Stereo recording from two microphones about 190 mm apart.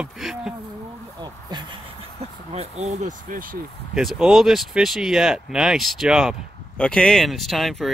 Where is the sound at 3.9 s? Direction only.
Centre (ahead or behind).